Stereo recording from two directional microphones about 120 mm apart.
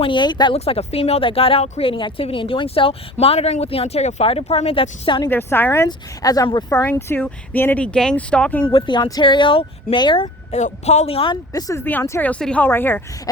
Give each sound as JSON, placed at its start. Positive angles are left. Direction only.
{"t": 0.0, "sound": "speech", "side_deg": 40}
{"t": 0.5, "sound": "speech", "side_deg": 55}
{"t": 1.8, "sound": "speech", "side_deg": 45}
{"t": 5.3, "sound": "speech", "side_deg": 20}
{"t": 6.9, "sound": "speech", "side_deg": 15}
{"t": 8.6, "sound": "speech", "side_deg": 40}
{"t": 10.5, "sound": "speech", "side_deg": 70}
{"t": 11.5, "sound": "speech", "side_deg": 20}